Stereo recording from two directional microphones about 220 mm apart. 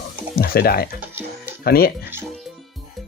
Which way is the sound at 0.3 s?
45° left (ahead or behind).